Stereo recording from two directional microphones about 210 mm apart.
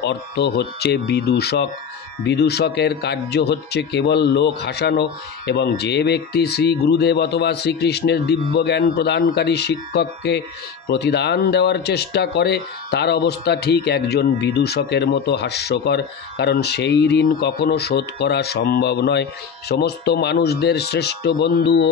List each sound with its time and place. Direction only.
0.0 s speech: 55° left (ahead or behind)